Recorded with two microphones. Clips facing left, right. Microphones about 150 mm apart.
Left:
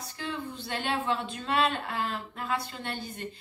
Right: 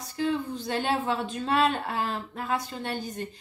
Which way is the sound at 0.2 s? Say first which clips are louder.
Right 8 dB; 40° right (ahead or behind).